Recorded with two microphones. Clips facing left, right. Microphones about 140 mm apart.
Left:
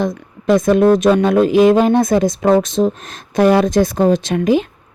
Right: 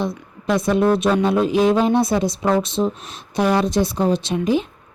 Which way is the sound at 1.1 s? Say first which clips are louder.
Left 5 dB; 55° left (ahead or behind).